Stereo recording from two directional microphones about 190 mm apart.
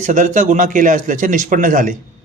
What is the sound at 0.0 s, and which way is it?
A man's voice, 40° right (ahead or behind).